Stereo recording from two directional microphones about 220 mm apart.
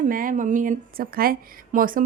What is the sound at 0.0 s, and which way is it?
Speech, 40° right (ahead or behind).